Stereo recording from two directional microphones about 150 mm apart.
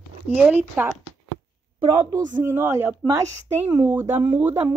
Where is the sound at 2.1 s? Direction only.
15° right (ahead or behind).